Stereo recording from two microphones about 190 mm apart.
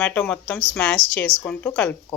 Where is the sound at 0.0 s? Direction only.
5° left (ahead or behind).